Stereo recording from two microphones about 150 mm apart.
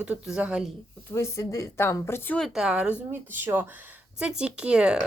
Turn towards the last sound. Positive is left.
turn(degrees=-5)  # may be behind; listen again after turning